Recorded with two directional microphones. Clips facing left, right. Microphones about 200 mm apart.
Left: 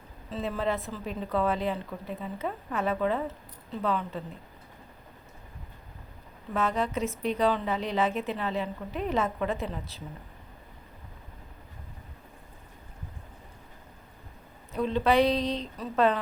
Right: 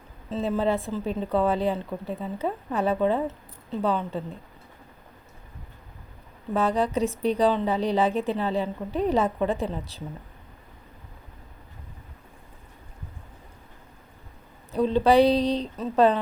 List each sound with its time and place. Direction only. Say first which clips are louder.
0.3 s speech: right 5 dB; 25° right (ahead or behind)
6.5 s speech: right 5 dB; 35° right (ahead or behind)
14.7 s speech: right 5 dB; 35° right (ahead or behind)